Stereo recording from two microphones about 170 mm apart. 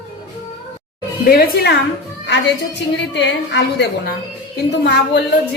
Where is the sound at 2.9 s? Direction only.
90° left.